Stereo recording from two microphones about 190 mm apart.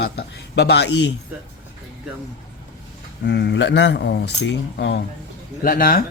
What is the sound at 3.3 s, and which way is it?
A man's voice, 60° left (ahead or behind).